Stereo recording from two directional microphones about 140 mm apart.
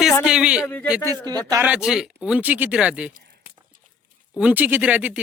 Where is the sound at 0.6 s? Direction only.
10° left (ahead or behind).